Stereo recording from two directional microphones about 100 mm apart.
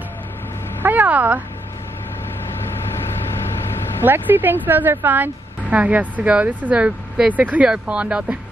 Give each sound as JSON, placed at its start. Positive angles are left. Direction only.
{"t": 0.8, "sound": "speech", "side_deg": -15}
{"t": 4.0, "sound": "speech", "side_deg": -20}